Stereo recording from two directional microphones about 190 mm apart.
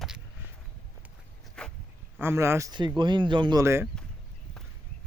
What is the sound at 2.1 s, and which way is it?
A man's voice, 15° right (ahead or behind).